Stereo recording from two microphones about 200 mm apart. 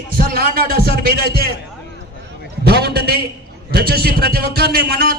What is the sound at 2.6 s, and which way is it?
A man's voice, 55° right (ahead or behind).